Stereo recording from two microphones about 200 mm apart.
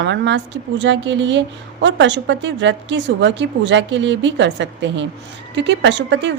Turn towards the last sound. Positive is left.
turn(degrees=-65)  # may be behind; listen again after turning